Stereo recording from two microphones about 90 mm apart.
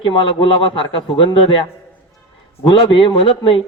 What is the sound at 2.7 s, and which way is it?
Speech, 70° left (ahead or behind).